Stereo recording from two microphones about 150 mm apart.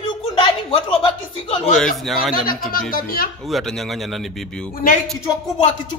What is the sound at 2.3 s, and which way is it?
Speech, 70° left (ahead or behind).